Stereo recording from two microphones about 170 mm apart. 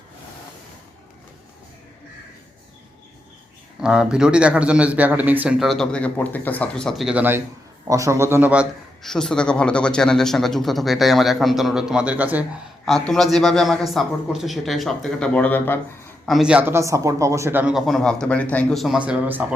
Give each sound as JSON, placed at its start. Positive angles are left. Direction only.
{"t": 3.8, "sound": "a man's voice", "side_deg": -5}
{"t": 9.0, "sound": "speech", "side_deg": 5}
{"t": 12.8, "sound": "speech", "side_deg": 0}
{"t": 16.2, "sound": "speech", "side_deg": 0}